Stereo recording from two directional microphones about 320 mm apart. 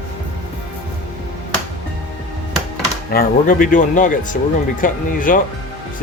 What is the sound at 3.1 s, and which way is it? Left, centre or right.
Speech, left.